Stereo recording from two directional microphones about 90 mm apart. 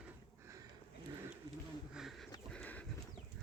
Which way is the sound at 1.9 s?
Centre (ahead or behind).